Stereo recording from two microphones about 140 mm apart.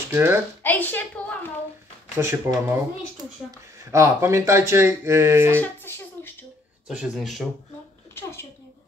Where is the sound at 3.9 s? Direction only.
20° right (ahead or behind).